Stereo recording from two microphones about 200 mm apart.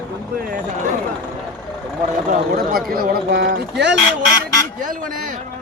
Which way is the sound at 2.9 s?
50° right (ahead or behind).